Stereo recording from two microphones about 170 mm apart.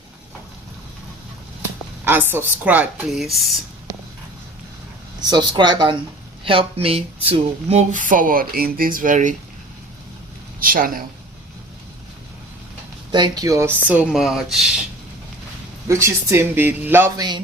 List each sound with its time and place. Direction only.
2.0 s speech: 15° right (ahead or behind)
5.2 s speech: 25° right (ahead or behind); by 9.3 s 50° right (ahead or behind)
10.6 s speech: 55° right (ahead or behind)
13.1 s speech: 25° right (ahead or behind); by 14.7 s 5° right (ahead or behind)
15.9 s speech: 15° right (ahead or behind)
17.2 s speech: 25° right (ahead or behind)